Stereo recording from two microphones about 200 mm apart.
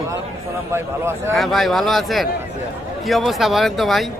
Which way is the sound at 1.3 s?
Centre (ahead or behind).